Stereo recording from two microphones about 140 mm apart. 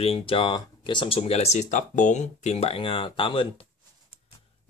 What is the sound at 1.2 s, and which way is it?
Speech, 50° left (ahead or behind).